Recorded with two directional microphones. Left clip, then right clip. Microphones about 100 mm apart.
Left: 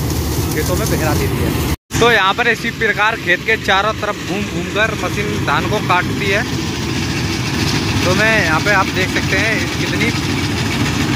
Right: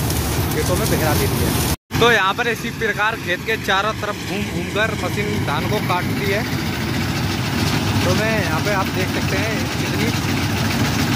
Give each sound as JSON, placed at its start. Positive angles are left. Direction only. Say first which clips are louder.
{"t": 2.0, "sound": "speech", "louder": "left 3 dB", "side_deg": 15}
{"t": 5.5, "sound": "speech", "louder": "left 7 dB", "side_deg": -5}
{"t": 8.0, "sound": "speech", "louder": "left 8 dB", "side_deg": 0}